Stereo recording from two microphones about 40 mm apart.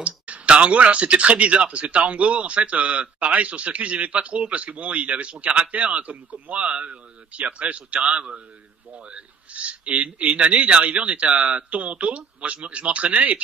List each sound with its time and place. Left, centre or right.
0.0 s speech: right